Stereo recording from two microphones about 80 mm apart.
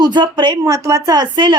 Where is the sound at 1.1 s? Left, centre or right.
Right.